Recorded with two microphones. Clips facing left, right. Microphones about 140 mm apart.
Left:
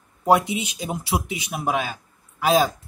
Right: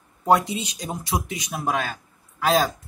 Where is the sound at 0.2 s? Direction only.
5° left (ahead or behind).